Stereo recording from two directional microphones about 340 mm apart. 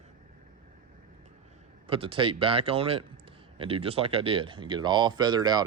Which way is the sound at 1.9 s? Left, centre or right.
Centre.